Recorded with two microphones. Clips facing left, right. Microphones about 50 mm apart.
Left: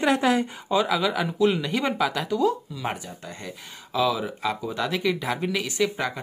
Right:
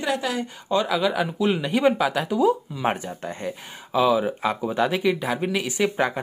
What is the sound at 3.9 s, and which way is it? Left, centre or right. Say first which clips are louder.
Speech: right 4 dB; right.